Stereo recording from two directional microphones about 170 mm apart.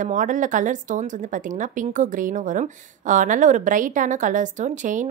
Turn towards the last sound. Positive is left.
turn(degrees=-45)  # may be behind; listen again after turning